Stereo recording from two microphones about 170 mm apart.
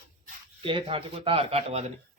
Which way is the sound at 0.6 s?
30° right (ahead or behind).